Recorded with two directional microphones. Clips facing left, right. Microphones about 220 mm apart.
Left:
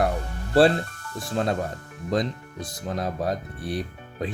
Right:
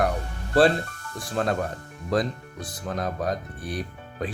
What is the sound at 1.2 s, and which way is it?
Speech, 25° left (ahead or behind).